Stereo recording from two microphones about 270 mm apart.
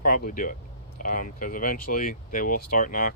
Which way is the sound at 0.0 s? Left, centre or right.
Left.